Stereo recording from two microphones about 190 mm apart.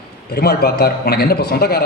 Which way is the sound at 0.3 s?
55° left (ahead or behind).